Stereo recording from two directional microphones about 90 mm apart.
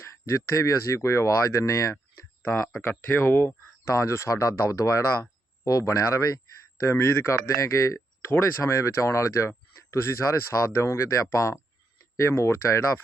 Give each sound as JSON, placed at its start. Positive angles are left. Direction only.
{"t": 0.0, "sound": "speech", "side_deg": 30}
{"t": 3.1, "sound": "speech", "side_deg": 25}